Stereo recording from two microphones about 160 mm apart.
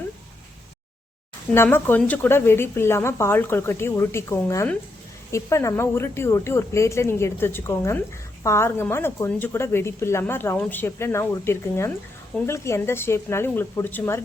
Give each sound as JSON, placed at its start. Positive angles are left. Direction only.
{"t": 1.5, "sound": "a woman's voice", "side_deg": 10}